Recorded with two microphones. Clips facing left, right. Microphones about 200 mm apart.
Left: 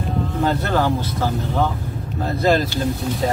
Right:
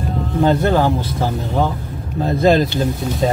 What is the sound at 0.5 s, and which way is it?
Speech, 20° right (ahead or behind).